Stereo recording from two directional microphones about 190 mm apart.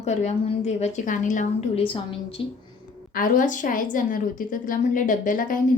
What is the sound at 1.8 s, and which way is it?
Speech, 30° left (ahead or behind).